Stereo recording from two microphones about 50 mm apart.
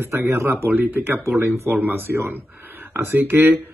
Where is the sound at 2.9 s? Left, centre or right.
Right.